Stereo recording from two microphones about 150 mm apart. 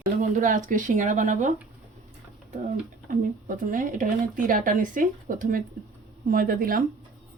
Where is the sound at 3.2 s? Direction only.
65° right (ahead or behind).